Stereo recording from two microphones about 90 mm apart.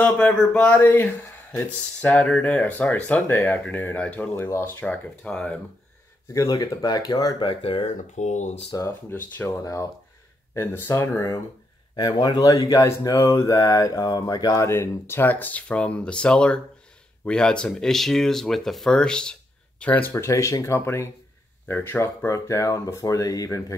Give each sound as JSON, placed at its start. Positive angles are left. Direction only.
{"t": 0.0, "sound": "speech", "side_deg": 15}
{"t": 0.7, "sound": "speech", "side_deg": 25}
{"t": 6.3, "sound": "speech", "side_deg": 40}
{"t": 7.3, "sound": "speech", "side_deg": 70}
{"t": 8.7, "sound": "speech", "side_deg": 45}
{"t": 9.1, "sound": "speech", "side_deg": 25}
{"t": 11.9, "sound": "speech", "side_deg": 50}
{"t": 20.2, "sound": "speech", "side_deg": 35}